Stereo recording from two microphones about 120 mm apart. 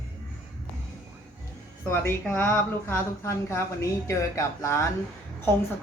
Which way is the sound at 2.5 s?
20° left (ahead or behind).